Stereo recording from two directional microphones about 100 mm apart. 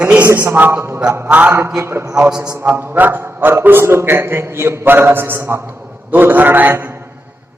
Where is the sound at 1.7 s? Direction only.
25° right (ahead or behind).